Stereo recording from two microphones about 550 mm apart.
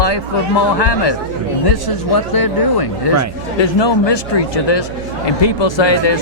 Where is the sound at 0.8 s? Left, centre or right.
Left.